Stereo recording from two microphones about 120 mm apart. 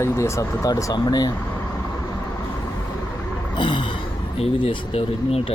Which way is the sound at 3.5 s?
40° left (ahead or behind).